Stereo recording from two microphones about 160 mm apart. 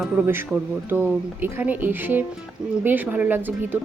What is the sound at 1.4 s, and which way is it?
A woman's voice, 10° right (ahead or behind).